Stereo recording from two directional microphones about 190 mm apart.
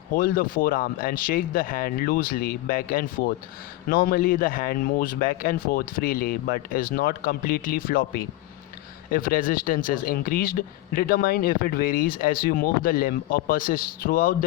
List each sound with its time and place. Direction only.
0.1 s speech: 50° left (ahead or behind)